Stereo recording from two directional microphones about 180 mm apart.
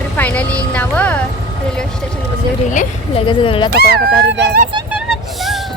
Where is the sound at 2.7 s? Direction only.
45° left (ahead or behind).